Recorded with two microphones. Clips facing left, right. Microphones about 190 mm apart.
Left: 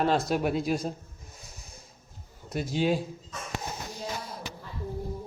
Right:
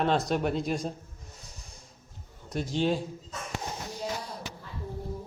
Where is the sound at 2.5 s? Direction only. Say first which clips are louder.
Left 1 dB; 10° left (ahead or behind).